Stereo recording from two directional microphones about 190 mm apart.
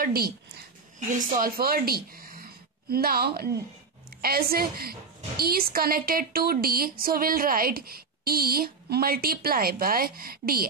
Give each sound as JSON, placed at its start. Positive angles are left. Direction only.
{"t": 0.0, "sound": "speech", "side_deg": -50}